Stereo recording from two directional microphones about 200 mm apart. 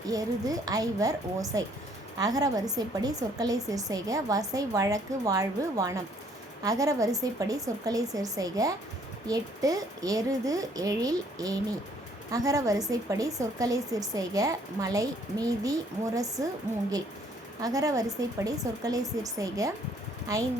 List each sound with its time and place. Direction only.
0.1 s a woman's voice: 20° right (ahead or behind)
17.6 s a woman's voice: 15° right (ahead or behind)